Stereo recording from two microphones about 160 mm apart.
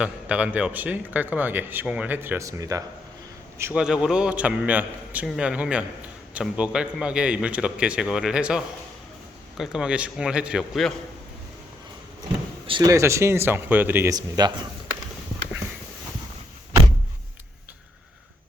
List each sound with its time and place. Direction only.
0.0 s speech: 5° right (ahead or behind)
3.6 s a man's voice: 10° right (ahead or behind)
12.6 s speech: 30° right (ahead or behind)
12.9 s speech: 15° right (ahead or behind)